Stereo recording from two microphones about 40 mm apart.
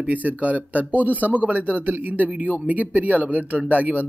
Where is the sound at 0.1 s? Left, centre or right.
Right.